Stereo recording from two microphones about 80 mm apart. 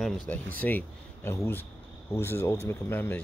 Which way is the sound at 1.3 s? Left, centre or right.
Left.